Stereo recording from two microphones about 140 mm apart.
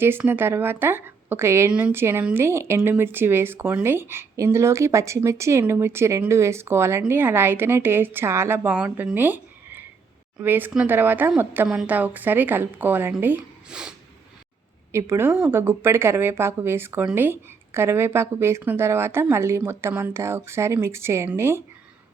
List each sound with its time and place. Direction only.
0.0 s speech: 15° right (ahead or behind)
14.9 s a woman's voice: 20° right (ahead or behind)